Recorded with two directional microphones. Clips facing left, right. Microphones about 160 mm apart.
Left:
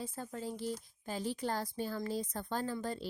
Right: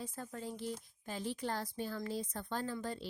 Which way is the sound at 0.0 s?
35° left (ahead or behind).